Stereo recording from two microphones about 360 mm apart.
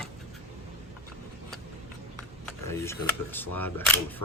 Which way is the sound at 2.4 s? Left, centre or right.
Centre.